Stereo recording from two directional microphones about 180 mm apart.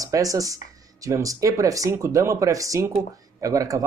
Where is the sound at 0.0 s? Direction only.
20° right (ahead or behind).